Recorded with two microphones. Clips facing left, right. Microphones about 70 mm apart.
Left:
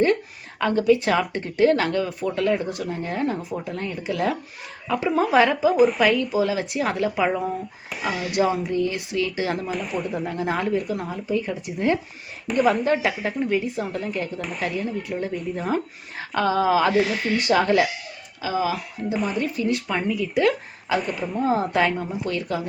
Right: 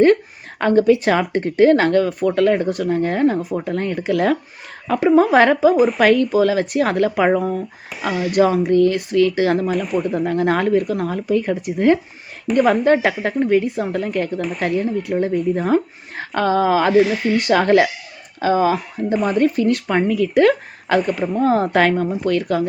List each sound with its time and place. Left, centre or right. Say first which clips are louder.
0.6 s speech: right 5 dB; right
5.7 s speech: right 2 dB; centre
6.0 s speech: right 6 dB; right
8.3 s speech: right 8 dB; right
9.7 s speech: right 7 dB; centre
10.2 s speech: right 8 dB; right
12.5 s speech: right 6 dB; centre
12.8 s speech: right 6 dB; right
19.1 s speech: right 7 dB; centre
19.4 s speech: right 8 dB; right
22.0 s a woman's voice: right 8 dB; right
22.4 s speech: right 7 dB; right